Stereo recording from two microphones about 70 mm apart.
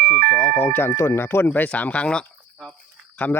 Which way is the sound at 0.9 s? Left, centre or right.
Left.